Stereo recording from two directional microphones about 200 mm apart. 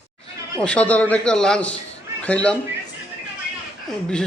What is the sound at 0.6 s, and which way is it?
A man's voice, 5° left (ahead or behind).